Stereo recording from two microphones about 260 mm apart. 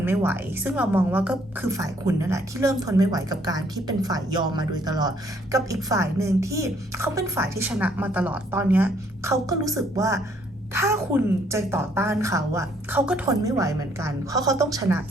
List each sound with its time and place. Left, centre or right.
0.0 s speech: centre